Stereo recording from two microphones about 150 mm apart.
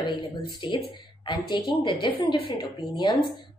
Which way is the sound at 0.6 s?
30° left (ahead or behind).